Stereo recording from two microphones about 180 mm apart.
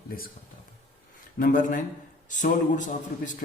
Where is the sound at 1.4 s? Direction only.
45° left (ahead or behind).